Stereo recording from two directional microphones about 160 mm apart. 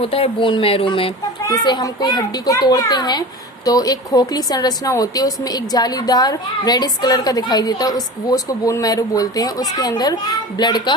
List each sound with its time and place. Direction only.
0.0 s speech: 35° left (ahead or behind)
1.5 s a woman's voice: 25° left (ahead or behind)